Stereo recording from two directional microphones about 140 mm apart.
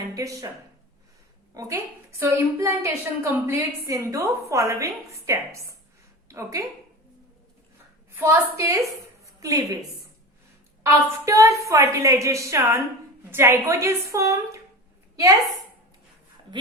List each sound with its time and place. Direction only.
0.1 s speech: 25° right (ahead or behind)
1.5 s a woman's voice: 20° right (ahead or behind)
8.1 s a woman's voice: 20° right (ahead or behind)
10.8 s a woman's voice: 20° right (ahead or behind)
15.1 s a sound: 25° right (ahead or behind)